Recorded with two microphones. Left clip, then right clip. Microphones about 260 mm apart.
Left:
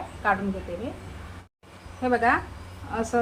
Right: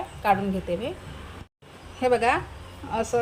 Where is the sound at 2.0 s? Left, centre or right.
Right.